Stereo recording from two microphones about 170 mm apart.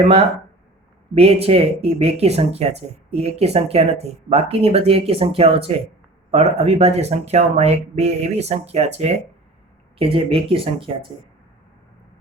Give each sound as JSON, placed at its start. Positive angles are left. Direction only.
{"t": 0.0, "sound": "speech", "side_deg": -35}